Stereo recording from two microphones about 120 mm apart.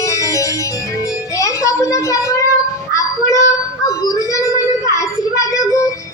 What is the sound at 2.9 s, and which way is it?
Child singing, 25° left (ahead or behind).